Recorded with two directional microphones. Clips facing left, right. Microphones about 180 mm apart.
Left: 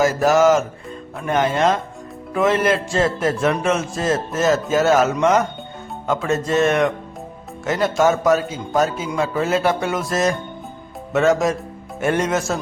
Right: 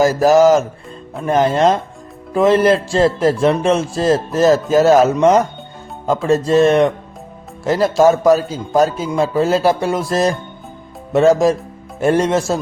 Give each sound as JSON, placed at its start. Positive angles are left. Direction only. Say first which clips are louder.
{"t": 0.0, "sound": "speech", "louder": "right 4 dB", "side_deg": -35}